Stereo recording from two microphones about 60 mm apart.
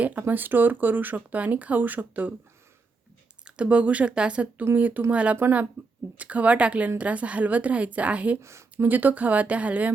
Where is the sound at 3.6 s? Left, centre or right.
Right.